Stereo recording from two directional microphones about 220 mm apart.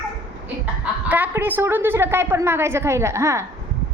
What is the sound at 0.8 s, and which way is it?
A woman's voice, 5° right (ahead or behind).